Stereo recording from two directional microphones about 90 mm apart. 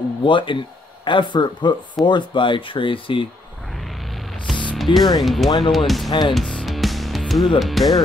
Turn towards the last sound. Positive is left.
turn(degrees=0)  # may be behind; listen again after turning